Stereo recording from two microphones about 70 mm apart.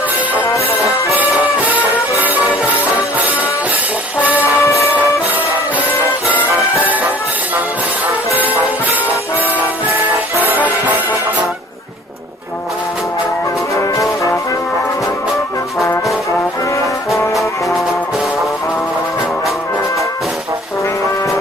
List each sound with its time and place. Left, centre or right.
1.1 s music: right
4.2 s music: right
4.6 s music: left
6.7 s music: right
13.9 s brass instrument: left